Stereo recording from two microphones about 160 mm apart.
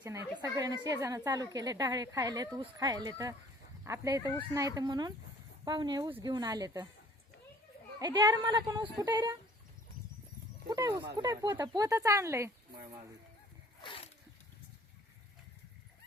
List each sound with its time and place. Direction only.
0.0 s speech: 20° right (ahead or behind)
7.9 s speech: 25° right (ahead or behind)
10.7 s speech: 20° right (ahead or behind)
13.8 s a sound: 35° left (ahead or behind)